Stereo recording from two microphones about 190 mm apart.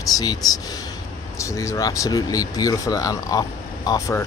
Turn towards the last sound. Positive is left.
turn(degrees=20)  # may be behind; listen again after turning